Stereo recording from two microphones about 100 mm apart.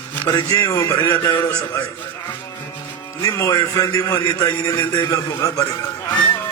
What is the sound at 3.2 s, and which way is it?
A man's voice, 30° left (ahead or behind).